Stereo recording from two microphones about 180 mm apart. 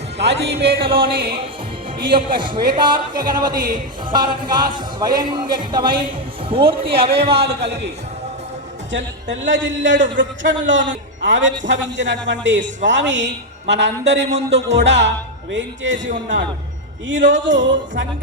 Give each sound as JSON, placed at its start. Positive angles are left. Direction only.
{"t": 0.2, "sound": "speech", "side_deg": -65}
{"t": 0.8, "sound": "a sound", "side_deg": -30}
{"t": 2.0, "sound": "a man's voice", "side_deg": -25}
{"t": 7.4, "sound": "speech", "side_deg": -70}
{"t": 8.9, "sound": "a man's voice", "side_deg": -80}
{"t": 17.1, "sound": "a man's voice", "side_deg": -90}